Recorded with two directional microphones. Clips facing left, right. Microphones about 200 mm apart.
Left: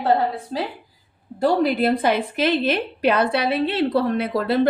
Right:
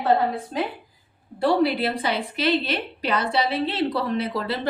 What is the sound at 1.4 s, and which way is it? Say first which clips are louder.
A woman's voice: left 2 dB; 45° left (ahead or behind).